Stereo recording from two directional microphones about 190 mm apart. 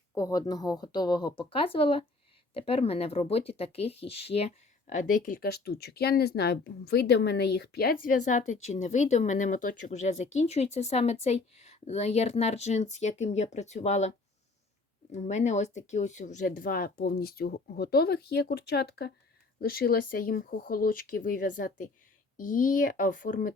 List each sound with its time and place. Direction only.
0.1 s speech: 20° left (ahead or behind); by 7.9 s 55° left (ahead or behind)
8.0 s speech: 40° left (ahead or behind)
15.1 s speech: 35° left (ahead or behind)